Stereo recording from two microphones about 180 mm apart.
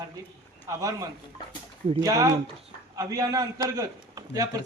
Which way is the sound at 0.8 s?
20° right (ahead or behind).